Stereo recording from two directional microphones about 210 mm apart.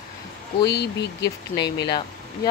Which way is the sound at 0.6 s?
50° left (ahead or behind).